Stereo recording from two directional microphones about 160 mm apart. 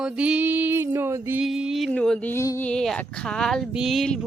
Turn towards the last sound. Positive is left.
turn(degrees=0)  # may be behind; listen again after turning